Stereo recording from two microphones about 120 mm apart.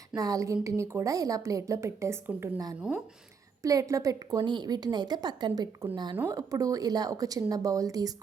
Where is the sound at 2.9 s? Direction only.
5° right (ahead or behind).